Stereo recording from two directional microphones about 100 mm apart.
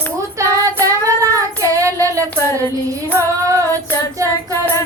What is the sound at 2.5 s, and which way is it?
Music, 35° right (ahead or behind).